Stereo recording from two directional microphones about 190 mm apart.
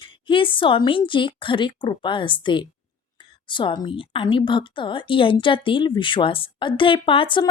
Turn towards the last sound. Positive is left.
turn(degrees=25)  # may be behind; listen again after turning